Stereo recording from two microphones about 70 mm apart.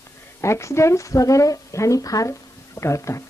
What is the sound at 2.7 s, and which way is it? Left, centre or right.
Speech, left.